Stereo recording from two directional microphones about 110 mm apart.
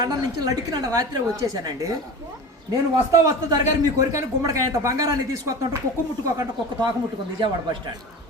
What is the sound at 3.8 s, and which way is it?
A woman's voice, 30° right (ahead or behind).